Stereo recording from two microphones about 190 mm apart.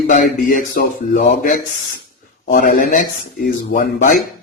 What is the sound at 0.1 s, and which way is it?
Speech, 45° left (ahead or behind).